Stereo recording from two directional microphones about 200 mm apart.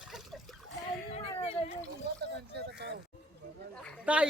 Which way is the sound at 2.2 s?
55° right (ahead or behind).